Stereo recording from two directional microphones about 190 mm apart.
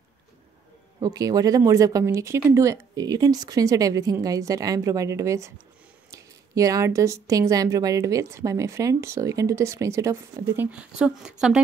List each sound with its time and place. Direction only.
0.9 s a woman's voice: 20° right (ahead or behind)